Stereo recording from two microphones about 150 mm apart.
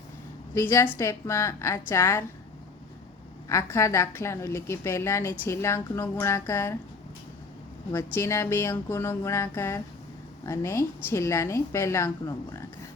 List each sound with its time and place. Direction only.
0.5 s a woman's voice: 15° left (ahead or behind)
3.5 s a woman's voice: 20° left (ahead or behind)
7.9 s a woman's voice: 15° left (ahead or behind)